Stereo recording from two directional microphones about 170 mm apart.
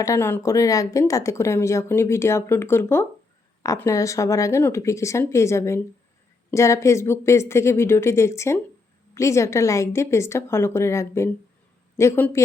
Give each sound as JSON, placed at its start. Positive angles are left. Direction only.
{"t": 0.0, "sound": "speech", "side_deg": 15}